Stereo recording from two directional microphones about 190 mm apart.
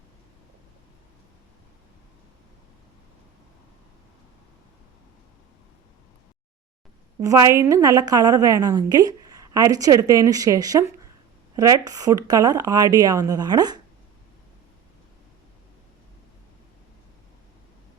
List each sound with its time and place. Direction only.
7.2 s a woman's voice: 15° right (ahead or behind)